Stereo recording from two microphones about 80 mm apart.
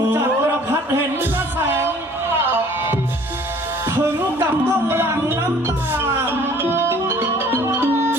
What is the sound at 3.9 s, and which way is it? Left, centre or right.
Music, right.